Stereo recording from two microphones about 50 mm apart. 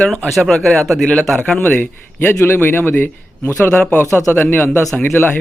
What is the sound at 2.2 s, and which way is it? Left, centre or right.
A man's voice, left.